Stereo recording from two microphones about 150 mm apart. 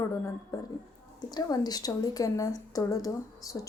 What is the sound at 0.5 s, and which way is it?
Speech, 25° left (ahead or behind).